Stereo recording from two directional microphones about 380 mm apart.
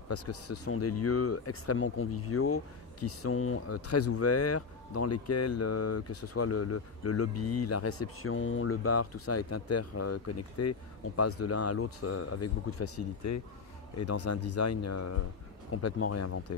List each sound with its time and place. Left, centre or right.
0.1 s speech: left